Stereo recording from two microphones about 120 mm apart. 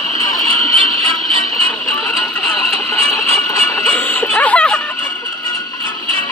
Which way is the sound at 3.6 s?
15° left (ahead or behind).